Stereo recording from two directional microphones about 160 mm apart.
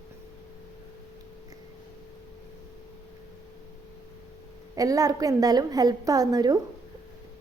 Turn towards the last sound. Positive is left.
turn(degrees=-25)  # may be behind; listen again after turning